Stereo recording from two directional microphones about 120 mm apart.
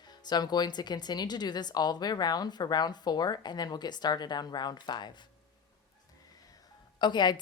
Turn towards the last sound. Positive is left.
turn(degrees=40)  # may be behind; listen again after turning